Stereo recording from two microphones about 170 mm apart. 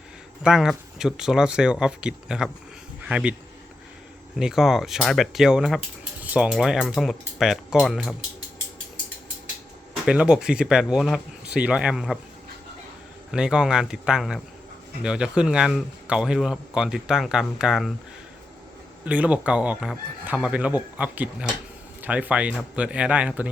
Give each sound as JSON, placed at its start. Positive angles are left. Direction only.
{"t": 0.4, "sound": "speech", "side_deg": -5}
{"t": 4.4, "sound": "speech", "side_deg": -5}
{"t": 9.9, "sound": "speech", "side_deg": -5}
{"t": 13.3, "sound": "speech", "side_deg": -5}
{"t": 19.0, "sound": "speech", "side_deg": -10}